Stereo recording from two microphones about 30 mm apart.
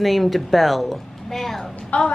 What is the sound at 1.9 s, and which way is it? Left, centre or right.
Speech, left.